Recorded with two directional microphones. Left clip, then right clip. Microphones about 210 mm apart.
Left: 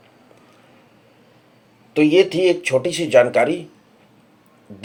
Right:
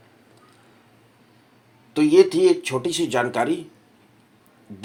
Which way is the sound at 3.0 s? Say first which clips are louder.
Left 10 dB; 30° right (ahead or behind).